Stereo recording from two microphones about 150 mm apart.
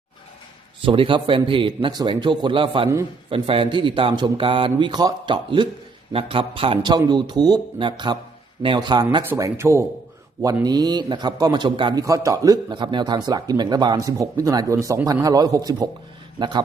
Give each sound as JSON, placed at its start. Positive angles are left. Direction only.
{"t": 0.8, "sound": "a man's voice", "side_deg": -35}
{"t": 9.3, "sound": "a man's voice", "side_deg": -20}